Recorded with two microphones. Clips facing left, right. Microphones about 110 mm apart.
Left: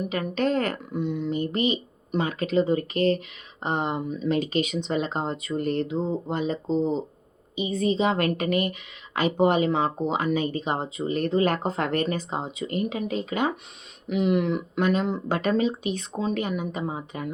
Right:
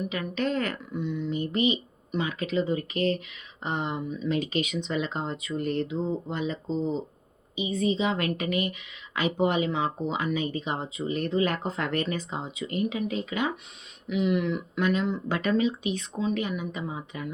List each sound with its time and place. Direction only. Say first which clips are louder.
0.1 s speech: left 4 dB; 40° left (ahead or behind)